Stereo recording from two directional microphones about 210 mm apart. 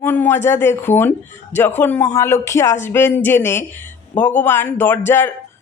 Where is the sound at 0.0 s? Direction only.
10° left (ahead or behind).